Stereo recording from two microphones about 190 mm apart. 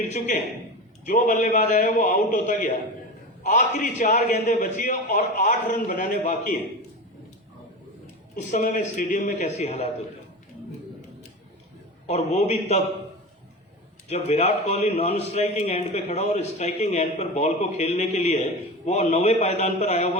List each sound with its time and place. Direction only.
0.1 s a man's voice: 35° left (ahead or behind)
8.4 s a man's voice: 40° left (ahead or behind)
12.0 s a man's voice: 35° left (ahead or behind)
14.1 s a man's voice: 35° left (ahead or behind)